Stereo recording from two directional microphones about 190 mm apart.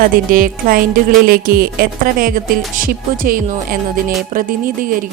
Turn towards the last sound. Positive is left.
turn(degrees=-45)  # may be behind; listen again after turning